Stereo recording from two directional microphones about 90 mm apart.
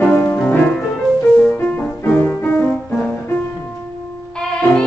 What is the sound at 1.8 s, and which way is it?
Music, 20° left (ahead or behind).